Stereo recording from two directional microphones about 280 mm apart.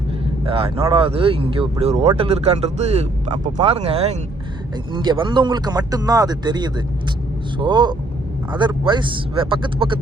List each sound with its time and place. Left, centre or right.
0.4 s speech: centre